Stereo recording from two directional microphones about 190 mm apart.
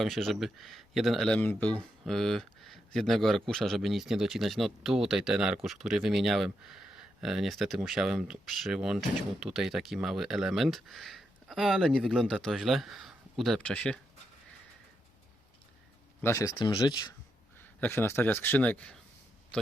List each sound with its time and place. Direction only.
0.0 s speech: centre (ahead or behind)
16.2 s speech: 15° left (ahead or behind)
17.6 s speech: 10° left (ahead or behind)